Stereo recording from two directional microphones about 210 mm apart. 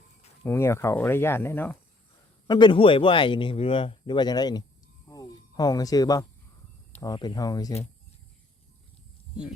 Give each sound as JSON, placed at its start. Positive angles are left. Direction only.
{"t": 0.4, "sound": "speech", "side_deg": 10}
{"t": 2.5, "sound": "speech", "side_deg": 20}
{"t": 5.0, "sound": "a sound", "side_deg": 15}
{"t": 7.0, "sound": "speech", "side_deg": 20}